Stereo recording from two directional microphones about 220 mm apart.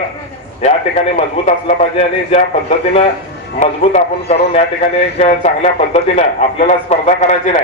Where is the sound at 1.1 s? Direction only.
30° left (ahead or behind).